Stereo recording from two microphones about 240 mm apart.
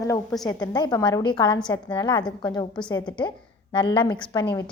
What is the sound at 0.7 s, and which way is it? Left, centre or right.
A woman's voice, centre.